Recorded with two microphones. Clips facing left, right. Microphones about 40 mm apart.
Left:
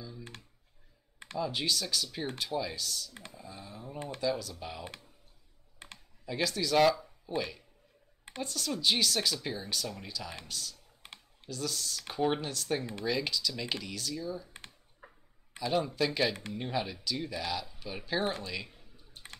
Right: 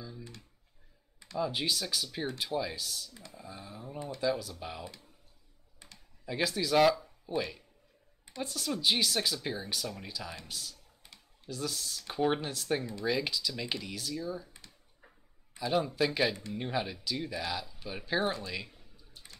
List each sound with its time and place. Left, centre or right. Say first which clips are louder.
1.4 s speech: even; centre
3.3 s a sound: right 2 dB; centre
4.2 s speech: right 1 dB; centre
5.8 s computer keyboard: left 6 dB; left
6.2 s speech: even; centre
11.0 s typing: left 7 dB; left
11.4 s speech: even; centre
15.0 s a sound: left 6 dB; left
15.7 s speech: right 1 dB; centre
18.9 s a sound: left 6 dB; left